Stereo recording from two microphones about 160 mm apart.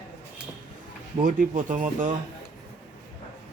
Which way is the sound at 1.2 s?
55° right (ahead or behind).